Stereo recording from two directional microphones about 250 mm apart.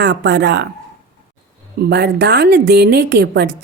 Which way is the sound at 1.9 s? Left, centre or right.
Right.